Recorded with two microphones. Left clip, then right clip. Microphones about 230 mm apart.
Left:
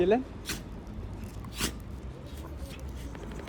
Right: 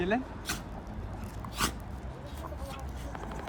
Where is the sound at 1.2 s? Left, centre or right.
Centre.